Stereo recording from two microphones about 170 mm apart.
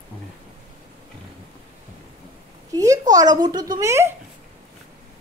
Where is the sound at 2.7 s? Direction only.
20° right (ahead or behind).